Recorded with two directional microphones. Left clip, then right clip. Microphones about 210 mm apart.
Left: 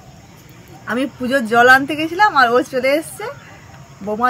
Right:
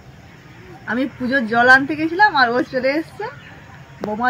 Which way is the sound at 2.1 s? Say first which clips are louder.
Left 2 dB; 15° left (ahead or behind).